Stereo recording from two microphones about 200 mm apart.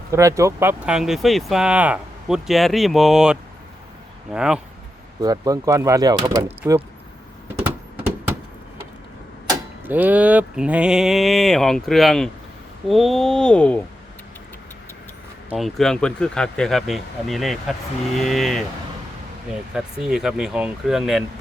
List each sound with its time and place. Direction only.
0.1 s speech: 15° right (ahead or behind)
5.2 s speech: 15° right (ahead or behind)
6.6 s speech: 10° right (ahead or behind)
9.5 s speech: 10° right (ahead or behind); by 13.8 s 5° left (ahead or behind)
15.4 s speech: centre (ahead or behind)
19.7 s speech: centre (ahead or behind)